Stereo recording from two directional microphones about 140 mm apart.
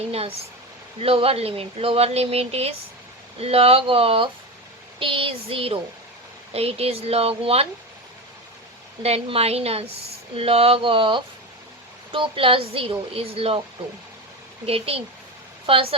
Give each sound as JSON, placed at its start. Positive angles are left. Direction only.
{"t": 0.1, "sound": "a woman's voice", "side_deg": -45}
{"t": 9.0, "sound": "a woman's voice", "side_deg": -45}
{"t": 14.7, "sound": "a woman's voice", "side_deg": -45}